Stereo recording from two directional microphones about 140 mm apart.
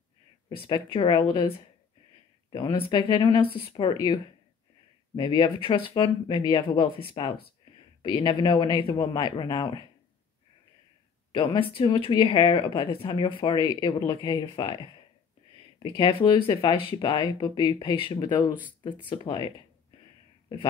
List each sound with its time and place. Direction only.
0.7 s speech: 35° left (ahead or behind)
2.5 s speech: 35° left (ahead or behind)
11.7 s speech: 35° left (ahead or behind)